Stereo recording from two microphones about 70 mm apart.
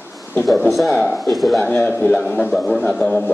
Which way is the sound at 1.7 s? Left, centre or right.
Left.